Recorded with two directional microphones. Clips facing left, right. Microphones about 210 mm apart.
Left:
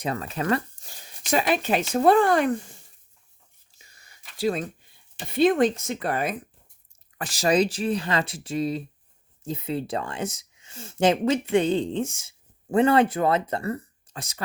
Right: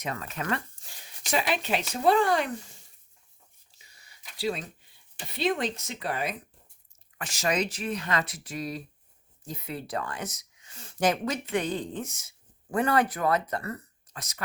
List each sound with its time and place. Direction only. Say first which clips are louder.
0.0 s speech: left 6 dB; 35° left (ahead or behind); by 2.7 s 50° left (ahead or behind)
3.8 s whispering: left 3 dB; 45° left (ahead or behind)
4.4 s speech: left 5 dB; 50° left (ahead or behind)
7.2 s speech: left 7 dB; 35° left (ahead or behind)